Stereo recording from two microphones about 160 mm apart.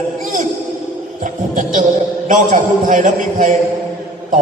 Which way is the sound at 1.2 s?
55° right (ahead or behind).